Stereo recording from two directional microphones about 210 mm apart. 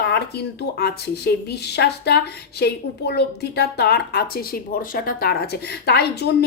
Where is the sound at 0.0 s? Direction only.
50° left (ahead or behind).